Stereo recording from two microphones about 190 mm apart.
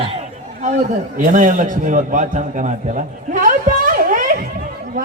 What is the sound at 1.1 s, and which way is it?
A man's voice, 45° right (ahead or behind).